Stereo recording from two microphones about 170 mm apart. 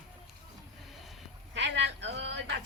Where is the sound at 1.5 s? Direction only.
90° right.